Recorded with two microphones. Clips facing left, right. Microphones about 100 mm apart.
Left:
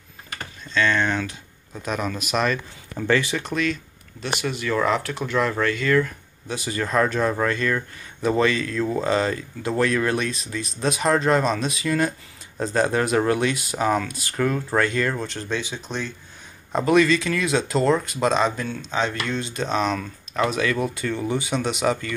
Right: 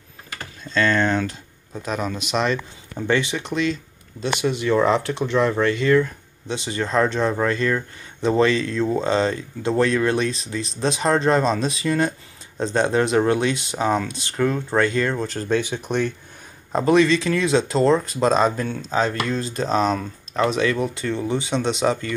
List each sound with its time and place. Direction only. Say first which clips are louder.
0.7 s speech: right 2 dB; 40° right (ahead or behind); by 16.1 s 55° right (ahead or behind)
16.7 s speech: right 1 dB; 30° right (ahead or behind)